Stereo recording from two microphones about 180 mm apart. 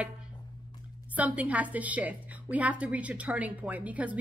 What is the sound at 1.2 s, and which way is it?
A woman's voice, 10° right (ahead or behind).